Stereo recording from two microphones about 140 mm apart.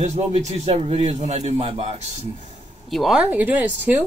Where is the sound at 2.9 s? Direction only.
Centre (ahead or behind).